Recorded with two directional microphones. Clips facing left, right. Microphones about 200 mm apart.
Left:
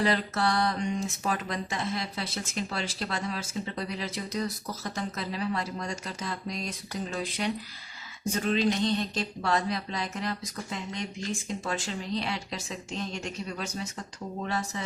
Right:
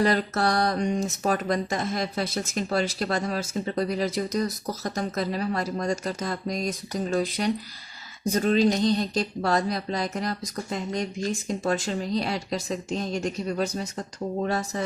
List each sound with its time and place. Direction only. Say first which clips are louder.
0.0 s speech: right 4 dB; 45° right (ahead or behind)